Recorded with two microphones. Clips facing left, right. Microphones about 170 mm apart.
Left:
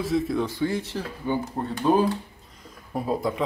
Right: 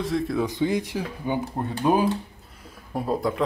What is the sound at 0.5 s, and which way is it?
Speech, 20° right (ahead or behind).